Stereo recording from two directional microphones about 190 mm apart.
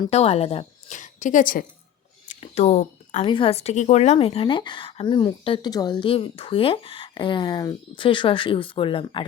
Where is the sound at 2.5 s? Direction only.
35° left (ahead or behind).